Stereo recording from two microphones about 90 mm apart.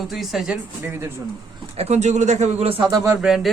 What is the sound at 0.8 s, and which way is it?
Speech, 30° right (ahead or behind).